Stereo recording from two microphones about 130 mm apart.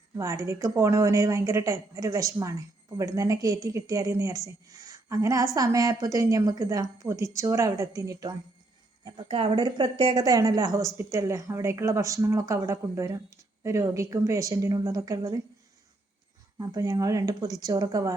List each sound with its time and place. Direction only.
0.2 s a woman's voice: 25° right (ahead or behind)
9.0 s speech: 40° right (ahead or behind)
10.2 s a woman's voice: 30° right (ahead or behind)
16.6 s a woman's voice: 25° right (ahead or behind)